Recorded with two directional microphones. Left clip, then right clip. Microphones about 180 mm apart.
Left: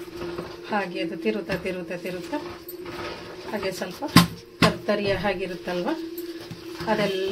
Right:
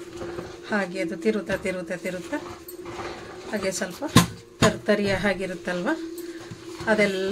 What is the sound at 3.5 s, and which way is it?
Speech, 25° right (ahead or behind).